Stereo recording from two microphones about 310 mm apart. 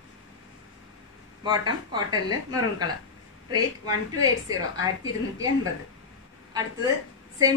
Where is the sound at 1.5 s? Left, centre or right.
Centre.